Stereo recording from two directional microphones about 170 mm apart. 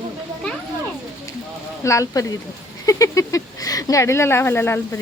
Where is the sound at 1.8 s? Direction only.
20° left (ahead or behind).